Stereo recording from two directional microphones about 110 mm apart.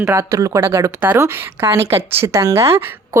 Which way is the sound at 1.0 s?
20° right (ahead or behind).